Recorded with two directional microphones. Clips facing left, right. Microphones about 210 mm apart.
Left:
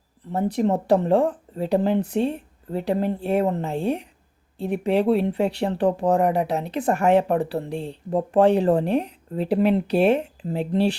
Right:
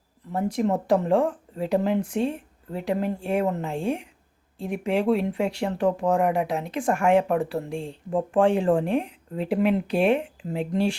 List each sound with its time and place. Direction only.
0.3 s speech: 35° left (ahead or behind)